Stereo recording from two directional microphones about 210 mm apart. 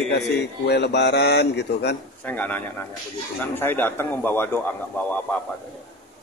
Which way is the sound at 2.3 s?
10° left (ahead or behind).